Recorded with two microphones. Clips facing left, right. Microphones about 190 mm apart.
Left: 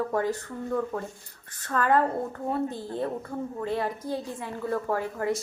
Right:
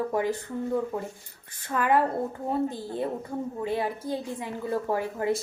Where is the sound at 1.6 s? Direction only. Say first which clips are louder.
Even; 10° right (ahead or behind).